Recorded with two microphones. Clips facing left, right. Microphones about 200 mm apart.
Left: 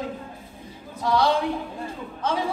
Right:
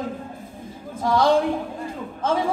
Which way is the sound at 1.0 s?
50° right (ahead or behind).